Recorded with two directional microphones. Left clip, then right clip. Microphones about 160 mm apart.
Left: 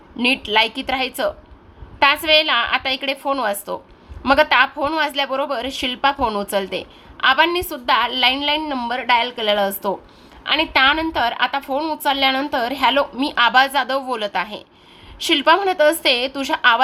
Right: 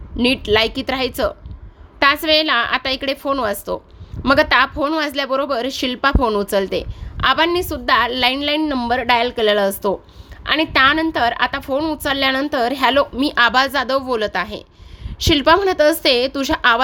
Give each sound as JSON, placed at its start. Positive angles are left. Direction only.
{"t": 0.2, "sound": "speech", "side_deg": -50}